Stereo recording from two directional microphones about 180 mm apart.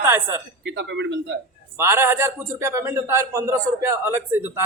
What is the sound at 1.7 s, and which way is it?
A man's voice, 15° right (ahead or behind).